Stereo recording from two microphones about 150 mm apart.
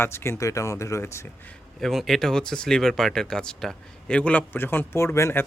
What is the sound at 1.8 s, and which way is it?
Speech, centre (ahead or behind).